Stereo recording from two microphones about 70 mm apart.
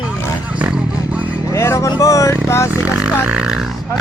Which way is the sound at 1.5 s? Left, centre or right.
Left.